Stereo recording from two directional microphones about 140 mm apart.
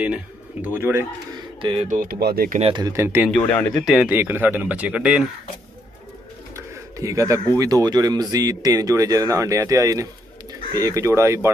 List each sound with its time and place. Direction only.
0.0 s speech: 10° right (ahead or behind)
1.6 s speech: 35° right (ahead or behind)
1.9 s speech: 80° right
2.6 s speech: 35° right (ahead or behind)
2.9 s speech: 20° right (ahead or behind)
3.3 s speech: 5° left (ahead or behind)
3.8 s speech: centre (ahead or behind)
4.1 s speech: 15° right (ahead or behind)
6.5 s speech: 20° right (ahead or behind)